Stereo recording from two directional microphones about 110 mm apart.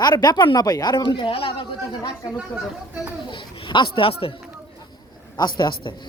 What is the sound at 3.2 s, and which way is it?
A child's voice, 45° left (ahead or behind).